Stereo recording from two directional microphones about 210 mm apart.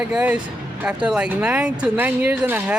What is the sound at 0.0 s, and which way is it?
Speech, 5° right (ahead or behind).